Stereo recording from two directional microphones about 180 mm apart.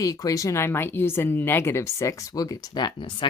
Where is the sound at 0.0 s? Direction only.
20° left (ahead or behind).